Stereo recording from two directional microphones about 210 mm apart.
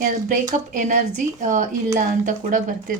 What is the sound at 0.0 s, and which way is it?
Speech, 40° right (ahead or behind).